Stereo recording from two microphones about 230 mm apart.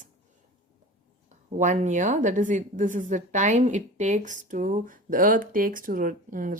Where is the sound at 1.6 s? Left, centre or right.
Right.